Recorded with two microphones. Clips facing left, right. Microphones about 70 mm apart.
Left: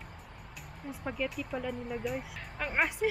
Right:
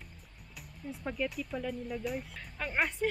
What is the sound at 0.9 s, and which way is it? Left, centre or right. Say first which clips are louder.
Speech: even; centre.